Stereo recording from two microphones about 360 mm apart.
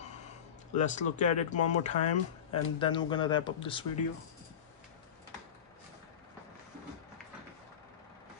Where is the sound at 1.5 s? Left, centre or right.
Left.